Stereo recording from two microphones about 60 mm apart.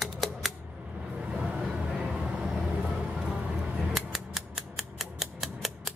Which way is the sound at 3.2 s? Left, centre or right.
Centre.